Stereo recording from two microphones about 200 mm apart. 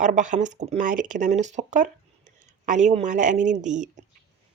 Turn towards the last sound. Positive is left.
turn(degrees=-40)  # may be behind; listen again after turning